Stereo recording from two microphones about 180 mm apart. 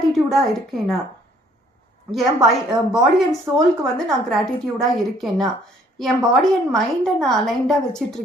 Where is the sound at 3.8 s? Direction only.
5° left (ahead or behind).